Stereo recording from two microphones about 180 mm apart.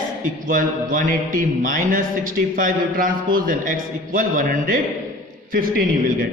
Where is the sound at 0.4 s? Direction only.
50° right (ahead or behind).